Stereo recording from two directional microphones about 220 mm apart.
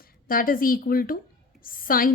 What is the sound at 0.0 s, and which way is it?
A woman's voice, 40° left (ahead or behind).